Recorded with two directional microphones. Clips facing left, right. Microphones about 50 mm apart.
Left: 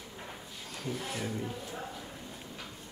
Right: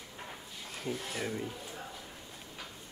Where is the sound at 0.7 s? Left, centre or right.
Centre.